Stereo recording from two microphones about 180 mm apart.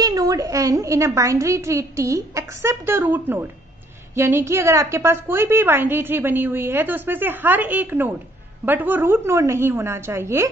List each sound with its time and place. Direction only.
0.0 s a woman's voice: 20° right (ahead or behind)